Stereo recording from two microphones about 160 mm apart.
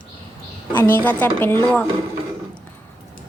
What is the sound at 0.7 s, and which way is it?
Speech, 10° left (ahead or behind).